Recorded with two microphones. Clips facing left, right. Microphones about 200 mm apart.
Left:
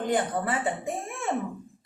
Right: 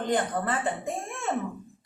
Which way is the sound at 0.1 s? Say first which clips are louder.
Even; 10° left (ahead or behind).